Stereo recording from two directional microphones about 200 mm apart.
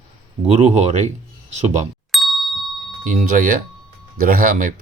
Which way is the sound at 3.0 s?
40° right (ahead or behind).